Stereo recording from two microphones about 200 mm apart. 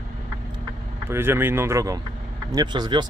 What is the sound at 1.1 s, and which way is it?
Speech, 10° right (ahead or behind).